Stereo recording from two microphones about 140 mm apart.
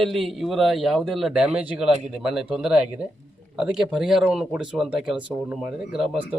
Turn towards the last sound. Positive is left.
turn(degrees=-5)  # may be behind; listen again after turning